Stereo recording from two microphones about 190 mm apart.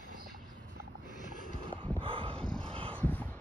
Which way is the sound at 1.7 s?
30° right (ahead or behind).